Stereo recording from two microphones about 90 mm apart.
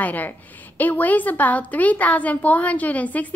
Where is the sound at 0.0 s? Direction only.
20° left (ahead or behind).